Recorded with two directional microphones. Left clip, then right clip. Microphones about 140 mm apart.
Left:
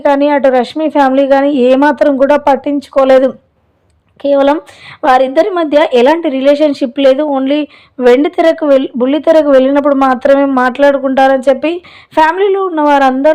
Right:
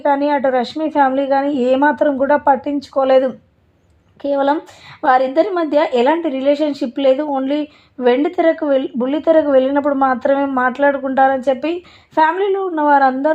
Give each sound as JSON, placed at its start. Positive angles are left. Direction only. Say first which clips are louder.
{"t": 0.0, "sound": "a woman's voice", "louder": "left 6 dB", "side_deg": 30}